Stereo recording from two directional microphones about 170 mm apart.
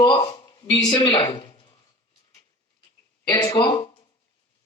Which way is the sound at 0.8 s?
30° left (ahead or behind).